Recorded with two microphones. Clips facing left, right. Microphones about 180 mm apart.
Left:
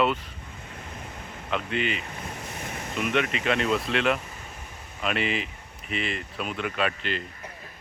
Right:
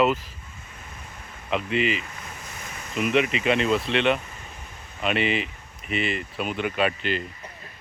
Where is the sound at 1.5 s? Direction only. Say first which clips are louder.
Right 4 dB; 5° right (ahead or behind).